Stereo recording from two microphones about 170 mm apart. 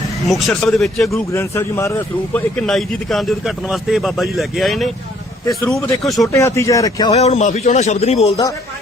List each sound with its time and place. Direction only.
0.3 s a man's voice: centre (ahead or behind)
1.1 s a man's voice: 15° left (ahead or behind)
5.8 s speech: 20° left (ahead or behind)
7.1 s speech: 40° left (ahead or behind)